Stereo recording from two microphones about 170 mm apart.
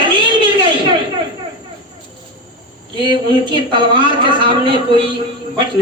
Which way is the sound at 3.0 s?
25° right (ahead or behind).